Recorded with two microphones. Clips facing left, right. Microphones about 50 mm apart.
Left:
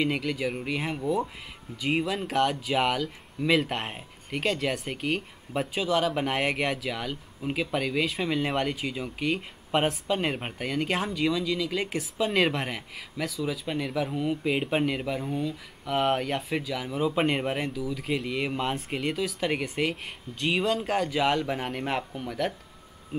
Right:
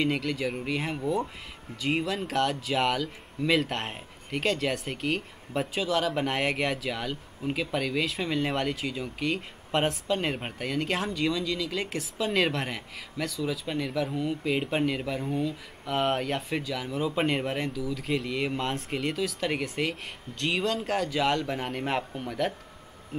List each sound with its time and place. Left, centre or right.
0.0 s speech: centre